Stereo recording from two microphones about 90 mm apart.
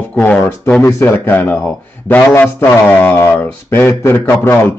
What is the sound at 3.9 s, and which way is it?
Speech, 35° left (ahead or behind).